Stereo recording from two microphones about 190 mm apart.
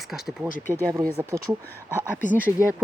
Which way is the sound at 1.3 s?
15° right (ahead or behind).